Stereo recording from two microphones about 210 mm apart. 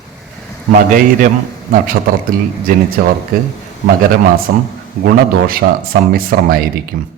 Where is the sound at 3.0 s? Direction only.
45° right (ahead or behind).